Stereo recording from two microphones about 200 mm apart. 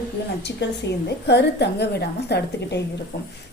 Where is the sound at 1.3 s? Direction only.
55° left (ahead or behind).